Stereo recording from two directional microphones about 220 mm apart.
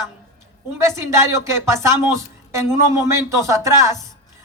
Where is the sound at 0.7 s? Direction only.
15° right (ahead or behind).